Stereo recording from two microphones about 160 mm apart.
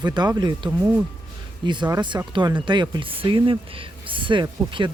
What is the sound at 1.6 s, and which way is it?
Speech, 30° right (ahead or behind).